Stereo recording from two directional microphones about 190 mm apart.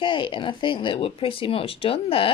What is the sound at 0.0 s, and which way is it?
Speech, 25° left (ahead or behind).